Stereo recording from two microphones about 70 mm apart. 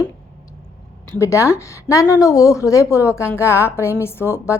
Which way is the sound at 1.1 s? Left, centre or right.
Left.